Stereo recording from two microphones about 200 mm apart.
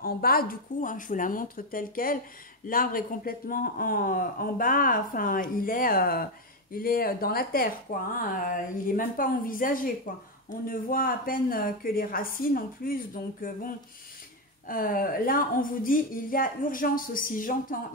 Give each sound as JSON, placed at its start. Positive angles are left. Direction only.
{"t": 0.0, "sound": "a man's voice", "side_deg": 50}
{"t": 14.7, "sound": "a man's voice", "side_deg": 45}